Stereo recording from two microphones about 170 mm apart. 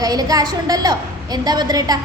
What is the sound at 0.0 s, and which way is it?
A woman's voice, 20° right (ahead or behind).